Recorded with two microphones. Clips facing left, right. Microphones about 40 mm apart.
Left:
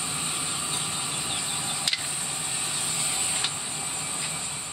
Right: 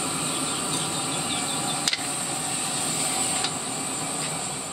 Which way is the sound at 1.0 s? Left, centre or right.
Right.